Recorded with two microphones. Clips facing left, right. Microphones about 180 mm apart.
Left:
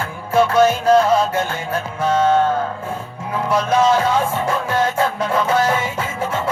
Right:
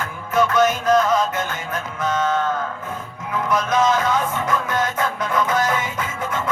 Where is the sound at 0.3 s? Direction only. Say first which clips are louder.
Left 3 dB; 30° left (ahead or behind).